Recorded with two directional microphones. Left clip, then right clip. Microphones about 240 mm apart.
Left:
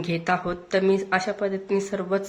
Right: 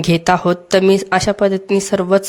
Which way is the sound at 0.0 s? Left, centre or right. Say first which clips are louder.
Right 11 dB; right.